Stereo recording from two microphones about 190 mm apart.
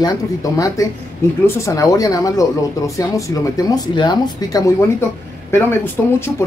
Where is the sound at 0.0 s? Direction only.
15° left (ahead or behind).